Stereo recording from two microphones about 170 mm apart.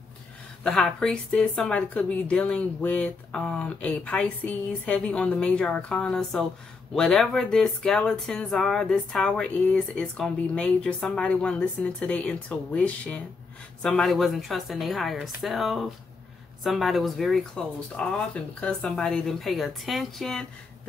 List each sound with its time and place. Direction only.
0.7 s speech: 5° left (ahead or behind)